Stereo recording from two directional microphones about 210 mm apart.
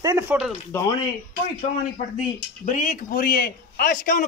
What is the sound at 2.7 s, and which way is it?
A man's voice, 35° left (ahead or behind).